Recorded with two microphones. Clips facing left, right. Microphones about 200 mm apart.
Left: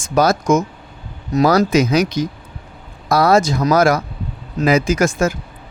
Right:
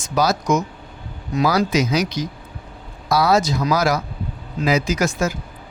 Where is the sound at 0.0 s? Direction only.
50° left (ahead or behind).